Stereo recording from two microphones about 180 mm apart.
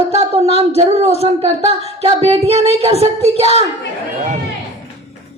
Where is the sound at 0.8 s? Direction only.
35° right (ahead or behind).